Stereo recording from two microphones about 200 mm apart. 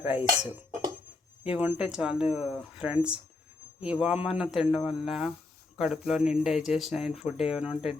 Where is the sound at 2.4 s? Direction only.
30° left (ahead or behind).